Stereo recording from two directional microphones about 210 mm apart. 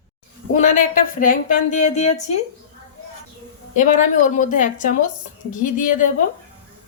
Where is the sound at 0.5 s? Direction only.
35° left (ahead or behind).